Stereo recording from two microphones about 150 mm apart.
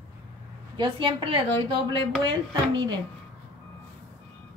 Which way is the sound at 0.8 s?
35° right (ahead or behind).